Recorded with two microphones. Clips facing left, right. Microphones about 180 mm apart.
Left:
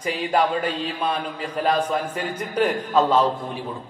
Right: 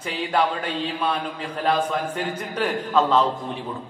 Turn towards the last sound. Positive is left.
turn(degrees=10)  # may be behind; listen again after turning